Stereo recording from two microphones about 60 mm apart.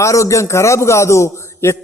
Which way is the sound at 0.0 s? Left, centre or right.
Left.